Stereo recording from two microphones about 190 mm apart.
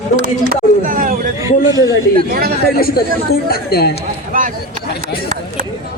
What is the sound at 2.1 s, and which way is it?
Speech, 55° right (ahead or behind).